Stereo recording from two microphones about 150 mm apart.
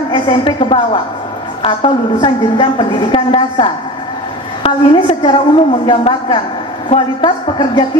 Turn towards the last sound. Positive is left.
turn(degrees=35)  # may be behind; listen again after turning